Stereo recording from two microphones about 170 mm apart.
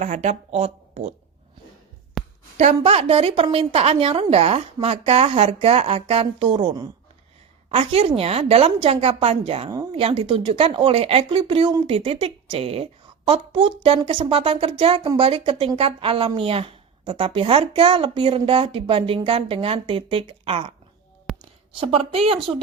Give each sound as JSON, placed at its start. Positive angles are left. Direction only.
{"t": 0.0, "sound": "a woman's voice", "side_deg": -45}
{"t": 2.2, "sound": "a sound", "side_deg": 0}
{"t": 2.6, "sound": "a woman's voice", "side_deg": -40}
{"t": 9.6, "sound": "speech", "side_deg": -20}
{"t": 9.9, "sound": "a woman's voice", "side_deg": -35}
{"t": 21.3, "sound": "a sound", "side_deg": 0}
{"t": 21.8, "sound": "a woman's voice", "side_deg": -35}